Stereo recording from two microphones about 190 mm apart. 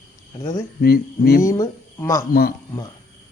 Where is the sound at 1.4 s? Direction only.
15° left (ahead or behind).